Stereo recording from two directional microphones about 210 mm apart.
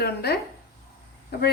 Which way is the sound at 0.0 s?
50° left (ahead or behind).